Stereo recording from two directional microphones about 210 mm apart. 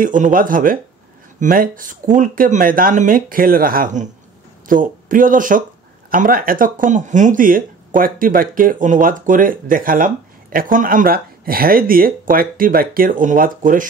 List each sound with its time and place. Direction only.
0.0 s speech: 40° right (ahead or behind)